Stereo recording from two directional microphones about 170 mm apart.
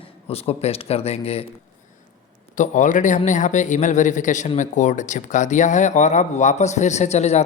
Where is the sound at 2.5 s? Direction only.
50° left (ahead or behind).